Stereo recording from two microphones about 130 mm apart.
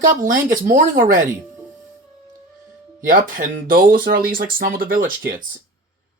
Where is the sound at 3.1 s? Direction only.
90° right.